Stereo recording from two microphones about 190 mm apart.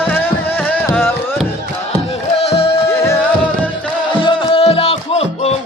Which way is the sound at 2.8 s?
15° left (ahead or behind).